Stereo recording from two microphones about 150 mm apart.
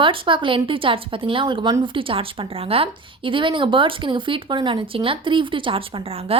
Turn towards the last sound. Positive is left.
turn(degrees=-40)  # may be behind; listen again after turning